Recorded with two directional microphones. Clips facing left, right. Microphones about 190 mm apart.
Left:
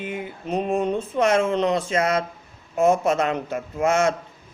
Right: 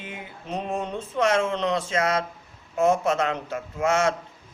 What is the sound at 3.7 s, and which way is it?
Speech, 50° left (ahead or behind).